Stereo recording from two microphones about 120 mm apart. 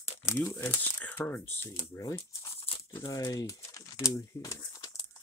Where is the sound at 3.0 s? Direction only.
35° left (ahead or behind).